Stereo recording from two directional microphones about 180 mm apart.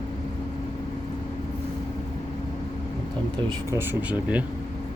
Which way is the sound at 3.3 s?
25° right (ahead or behind).